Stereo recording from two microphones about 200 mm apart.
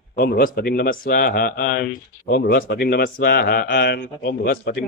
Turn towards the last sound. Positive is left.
turn(degrees=50)  # may be behind; listen again after turning